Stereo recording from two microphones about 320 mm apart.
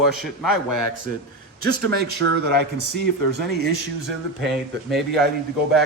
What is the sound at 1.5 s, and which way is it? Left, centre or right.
Speech, left.